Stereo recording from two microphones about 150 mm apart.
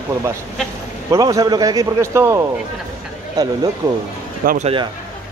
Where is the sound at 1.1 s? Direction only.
20° right (ahead or behind).